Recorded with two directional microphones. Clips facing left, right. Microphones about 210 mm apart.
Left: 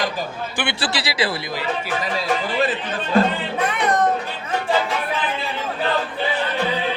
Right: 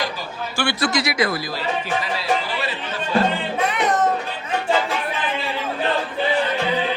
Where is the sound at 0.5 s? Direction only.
20° left (ahead or behind).